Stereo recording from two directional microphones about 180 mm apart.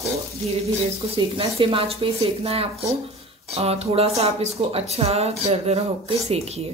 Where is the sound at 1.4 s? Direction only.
30° right (ahead or behind).